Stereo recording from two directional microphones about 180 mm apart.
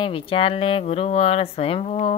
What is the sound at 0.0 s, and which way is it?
Speech, 30° left (ahead or behind).